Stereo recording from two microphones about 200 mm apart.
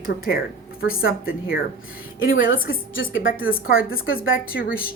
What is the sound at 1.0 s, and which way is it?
Speech, 45° left (ahead or behind).